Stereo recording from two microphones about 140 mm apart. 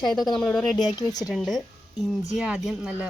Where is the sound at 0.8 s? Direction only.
30° left (ahead or behind).